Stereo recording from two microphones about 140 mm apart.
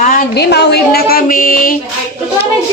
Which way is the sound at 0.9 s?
90° left.